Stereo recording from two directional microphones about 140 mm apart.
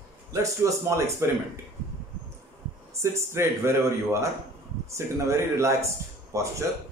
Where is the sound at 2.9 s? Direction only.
20° right (ahead or behind).